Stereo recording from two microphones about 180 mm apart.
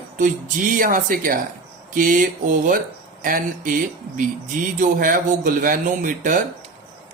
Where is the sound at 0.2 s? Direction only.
45° right (ahead or behind).